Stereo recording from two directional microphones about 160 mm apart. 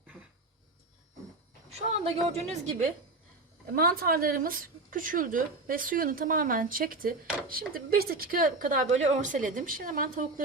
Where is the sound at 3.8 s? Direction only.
70° right (ahead or behind).